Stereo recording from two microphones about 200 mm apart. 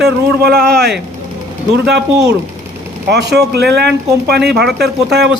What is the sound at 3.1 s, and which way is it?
Speech, 55° right (ahead or behind).